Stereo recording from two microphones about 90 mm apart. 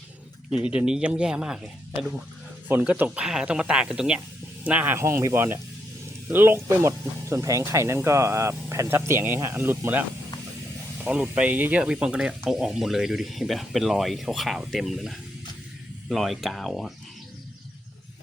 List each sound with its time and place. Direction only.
0.5 s speech: 10° right (ahead or behind)
2.6 s speech: 20° right (ahead or behind)
4.9 s speech: 30° right (ahead or behind); by 16.9 s centre (ahead or behind)